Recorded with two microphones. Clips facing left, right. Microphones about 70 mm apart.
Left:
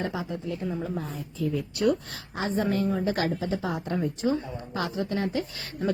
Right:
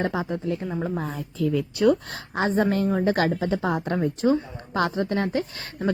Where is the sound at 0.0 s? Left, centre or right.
Right.